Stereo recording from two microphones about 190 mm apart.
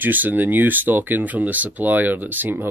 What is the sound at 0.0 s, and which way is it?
Speech, 10° right (ahead or behind).